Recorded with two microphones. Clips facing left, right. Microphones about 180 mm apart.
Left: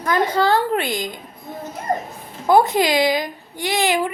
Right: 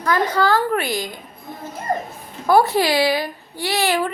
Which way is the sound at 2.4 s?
20° left (ahead or behind).